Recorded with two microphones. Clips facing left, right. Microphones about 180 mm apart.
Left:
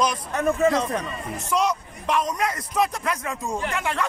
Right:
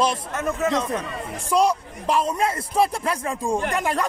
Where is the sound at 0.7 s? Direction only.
Centre (ahead or behind).